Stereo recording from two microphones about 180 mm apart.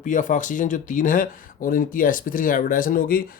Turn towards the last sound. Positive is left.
turn(degrees=50)  # may be behind; listen again after turning